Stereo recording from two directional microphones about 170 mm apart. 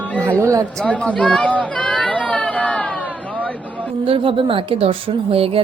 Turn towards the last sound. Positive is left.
turn(degrees=-35)  # may be behind; listen again after turning